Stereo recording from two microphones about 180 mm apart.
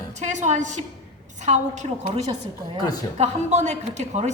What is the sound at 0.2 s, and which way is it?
A woman's voice, 40° right (ahead or behind).